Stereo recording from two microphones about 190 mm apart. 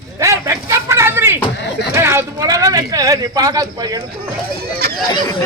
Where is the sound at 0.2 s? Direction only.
15° right (ahead or behind).